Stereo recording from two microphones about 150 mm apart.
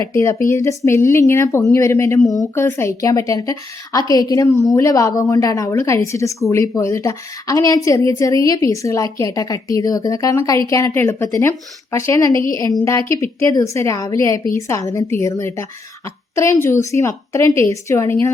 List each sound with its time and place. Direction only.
0.1 s a woman's voice: 20° left (ahead or behind)